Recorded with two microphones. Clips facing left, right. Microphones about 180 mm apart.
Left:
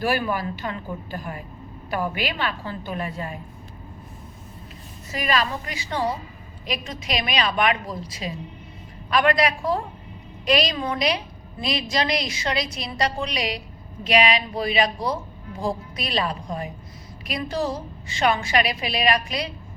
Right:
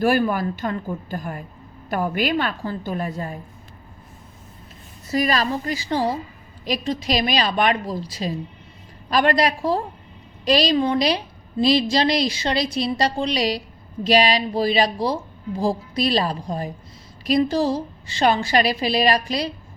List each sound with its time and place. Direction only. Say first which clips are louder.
0.0 s a woman's voice: right 5 dB; 45° right (ahead or behind)
5.1 s a woman's voice: right 4 dB; 35° right (ahead or behind)